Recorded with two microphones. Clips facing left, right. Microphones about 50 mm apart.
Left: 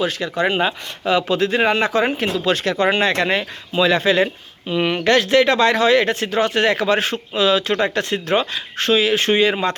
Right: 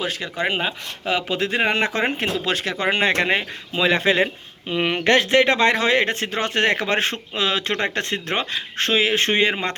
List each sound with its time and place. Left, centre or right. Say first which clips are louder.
0.4 s speech: left 4 dB; centre
1.0 s speech: left 5 dB; centre
1.7 s speech: left 4 dB; right
2.2 s speech: left 4 dB; centre